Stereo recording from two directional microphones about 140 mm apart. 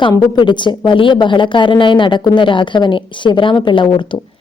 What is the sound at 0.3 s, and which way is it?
Speech, 35° left (ahead or behind).